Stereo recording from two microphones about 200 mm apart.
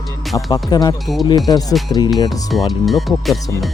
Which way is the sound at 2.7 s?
Centre (ahead or behind).